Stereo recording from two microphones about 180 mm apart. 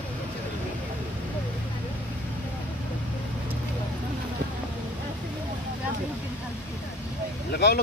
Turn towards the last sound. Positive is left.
turn(degrees=65)  # may be behind; listen again after turning